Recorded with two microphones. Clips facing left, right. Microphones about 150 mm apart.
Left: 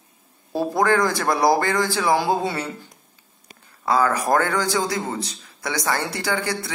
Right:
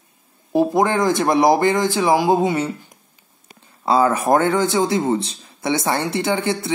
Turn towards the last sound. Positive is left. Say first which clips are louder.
# right 4 dB
turn(degrees=-25)  # may be behind; listen again after turning